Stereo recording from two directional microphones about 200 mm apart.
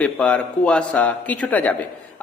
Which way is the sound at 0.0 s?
5° left (ahead or behind).